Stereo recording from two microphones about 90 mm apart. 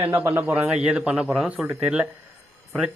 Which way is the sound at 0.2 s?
15° right (ahead or behind).